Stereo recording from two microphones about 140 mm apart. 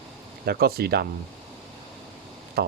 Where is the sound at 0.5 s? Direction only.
90° right.